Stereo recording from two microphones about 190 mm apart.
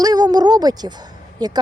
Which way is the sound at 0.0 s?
20° right (ahead or behind).